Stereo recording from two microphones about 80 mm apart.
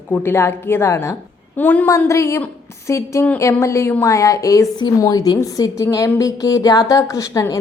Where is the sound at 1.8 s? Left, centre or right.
Left.